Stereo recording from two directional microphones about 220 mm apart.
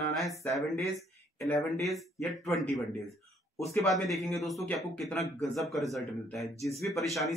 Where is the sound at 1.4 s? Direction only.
Centre (ahead or behind).